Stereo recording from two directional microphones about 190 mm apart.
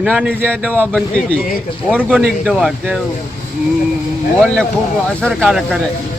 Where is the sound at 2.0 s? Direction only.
Centre (ahead or behind).